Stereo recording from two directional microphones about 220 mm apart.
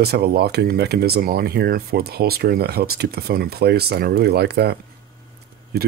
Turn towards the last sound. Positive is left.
turn(degrees=-45)  # may be behind; listen again after turning